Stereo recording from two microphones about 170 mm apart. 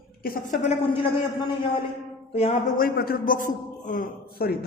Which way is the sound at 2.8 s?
60° left (ahead or behind).